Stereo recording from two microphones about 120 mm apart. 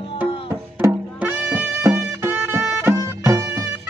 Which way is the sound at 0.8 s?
15° right (ahead or behind).